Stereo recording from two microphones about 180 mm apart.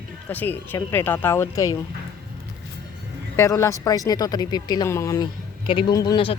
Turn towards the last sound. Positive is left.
turn(degrees=25)  # may be behind; listen again after turning